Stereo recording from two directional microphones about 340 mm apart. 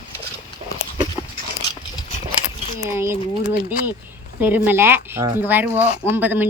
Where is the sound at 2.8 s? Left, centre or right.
Centre.